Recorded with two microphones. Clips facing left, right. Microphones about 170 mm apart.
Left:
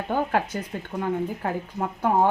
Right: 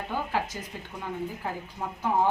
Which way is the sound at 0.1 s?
60° left (ahead or behind).